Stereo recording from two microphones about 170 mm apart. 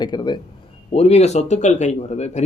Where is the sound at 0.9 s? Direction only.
40° left (ahead or behind).